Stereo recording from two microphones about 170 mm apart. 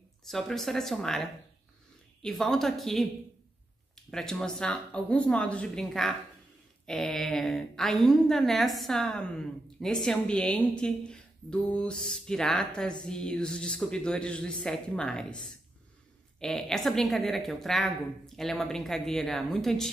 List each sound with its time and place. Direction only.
0.3 s a woman's voice: centre (ahead or behind)
16.3 s a woman's voice: 5° left (ahead or behind)